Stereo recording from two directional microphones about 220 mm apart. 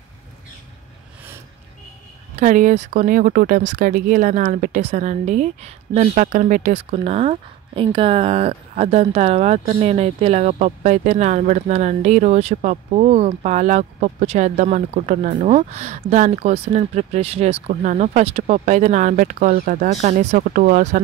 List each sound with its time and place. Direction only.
2.3 s speech: 35° right (ahead or behind)